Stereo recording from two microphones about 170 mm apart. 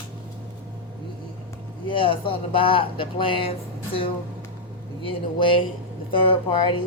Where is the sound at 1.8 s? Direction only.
30° left (ahead or behind).